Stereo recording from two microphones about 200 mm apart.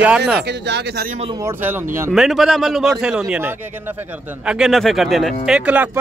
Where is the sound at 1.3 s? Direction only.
10° right (ahead or behind).